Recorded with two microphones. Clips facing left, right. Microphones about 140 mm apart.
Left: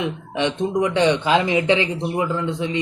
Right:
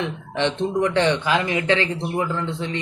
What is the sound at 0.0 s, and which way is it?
Speech, 15° left (ahead or behind).